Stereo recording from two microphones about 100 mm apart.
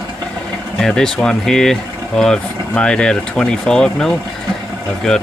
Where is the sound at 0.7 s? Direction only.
5° left (ahead or behind).